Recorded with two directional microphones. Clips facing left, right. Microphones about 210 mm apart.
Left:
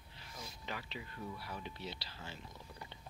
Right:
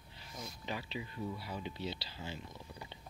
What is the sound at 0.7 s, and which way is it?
Speech, 20° right (ahead or behind).